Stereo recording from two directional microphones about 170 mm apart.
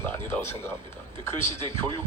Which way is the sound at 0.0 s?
15° left (ahead or behind).